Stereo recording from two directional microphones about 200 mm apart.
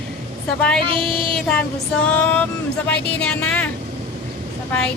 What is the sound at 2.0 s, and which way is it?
Music, 10° left (ahead or behind).